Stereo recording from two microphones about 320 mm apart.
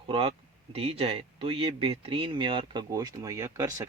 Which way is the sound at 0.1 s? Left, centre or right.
Centre.